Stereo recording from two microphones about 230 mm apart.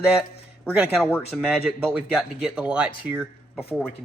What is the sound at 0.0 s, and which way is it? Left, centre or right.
A man's voice, centre.